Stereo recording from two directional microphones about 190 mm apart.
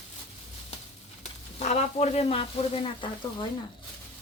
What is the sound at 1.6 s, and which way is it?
A woman's voice, 35° left (ahead or behind).